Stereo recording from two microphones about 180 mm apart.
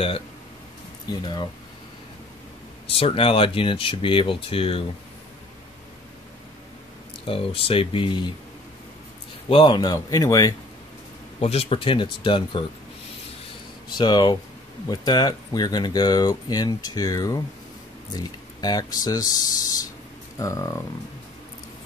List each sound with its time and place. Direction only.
1.2 s speech: 25° left (ahead or behind)
3.0 s speech: 30° left (ahead or behind)
7.2 s speech: 30° left (ahead or behind)
9.5 s speech: 25° left (ahead or behind)
11.3 s speech: 35° left (ahead or behind)
13.9 s speech: 25° left (ahead or behind)